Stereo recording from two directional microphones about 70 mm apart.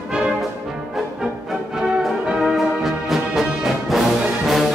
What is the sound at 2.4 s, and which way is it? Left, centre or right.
Music, centre.